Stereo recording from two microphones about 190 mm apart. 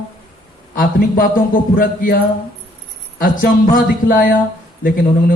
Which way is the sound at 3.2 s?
45° left (ahead or behind).